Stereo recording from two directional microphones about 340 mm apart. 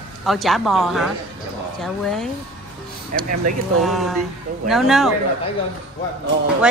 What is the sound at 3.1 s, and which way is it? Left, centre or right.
Speech, right.